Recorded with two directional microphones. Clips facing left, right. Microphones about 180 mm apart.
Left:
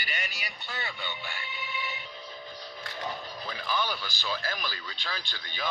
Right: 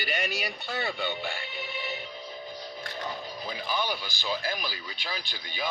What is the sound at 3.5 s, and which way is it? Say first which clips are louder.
Speech: right 1 dB; 15° right (ahead or behind).